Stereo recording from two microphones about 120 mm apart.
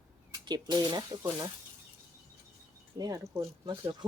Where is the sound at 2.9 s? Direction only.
30° right (ahead or behind).